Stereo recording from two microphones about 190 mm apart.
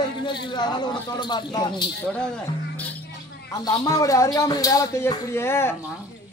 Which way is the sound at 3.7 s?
20° left (ahead or behind).